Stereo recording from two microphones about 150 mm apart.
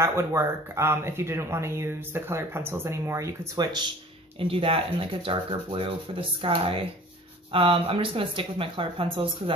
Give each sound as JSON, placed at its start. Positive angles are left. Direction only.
{"t": 0.0, "sound": "speech", "side_deg": -20}
{"t": 4.4, "sound": "speech", "side_deg": -40}